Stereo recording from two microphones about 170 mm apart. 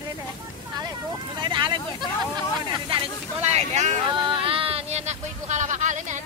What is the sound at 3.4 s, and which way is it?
Speech, 40° right (ahead or behind).